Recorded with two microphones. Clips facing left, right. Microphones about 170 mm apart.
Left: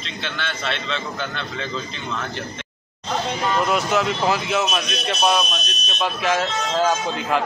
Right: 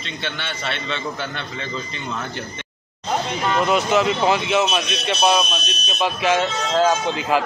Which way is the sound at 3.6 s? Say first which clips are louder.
Right 3 dB; centre (ahead or behind).